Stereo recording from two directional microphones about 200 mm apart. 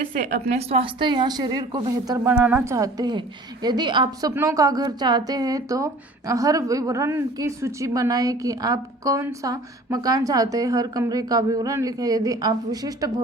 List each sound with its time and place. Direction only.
0.5 s a woman's voice: 30° right (ahead or behind)